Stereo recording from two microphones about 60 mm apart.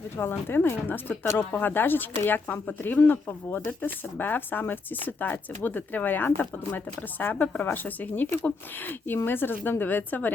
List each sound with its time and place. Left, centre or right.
0.2 s speech: left